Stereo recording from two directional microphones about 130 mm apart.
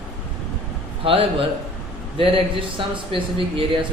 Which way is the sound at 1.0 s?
45° right (ahead or behind).